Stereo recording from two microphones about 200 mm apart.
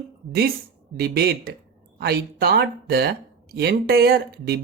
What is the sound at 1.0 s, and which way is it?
Speech, 50° right (ahead or behind).